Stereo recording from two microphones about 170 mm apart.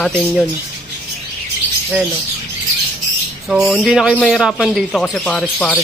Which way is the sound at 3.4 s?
5° right (ahead or behind).